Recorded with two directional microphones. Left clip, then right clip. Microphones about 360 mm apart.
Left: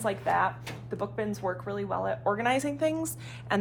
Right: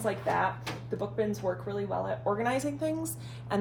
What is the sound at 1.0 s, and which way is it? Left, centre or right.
Speech, centre.